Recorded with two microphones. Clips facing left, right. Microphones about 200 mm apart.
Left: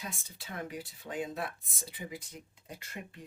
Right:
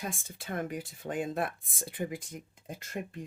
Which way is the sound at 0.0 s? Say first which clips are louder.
Right 5 dB; 50° right (ahead or behind).